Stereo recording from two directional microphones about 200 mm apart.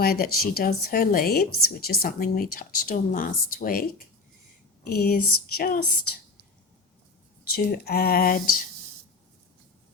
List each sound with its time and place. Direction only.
0.0 s a woman's voice: 50° left (ahead or behind)
7.5 s a woman's voice: 50° left (ahead or behind)